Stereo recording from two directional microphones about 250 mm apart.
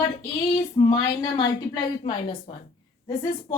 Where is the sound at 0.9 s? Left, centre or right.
Centre.